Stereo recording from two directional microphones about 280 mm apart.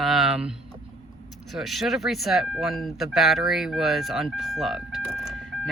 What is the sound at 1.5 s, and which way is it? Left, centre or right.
Speech, centre.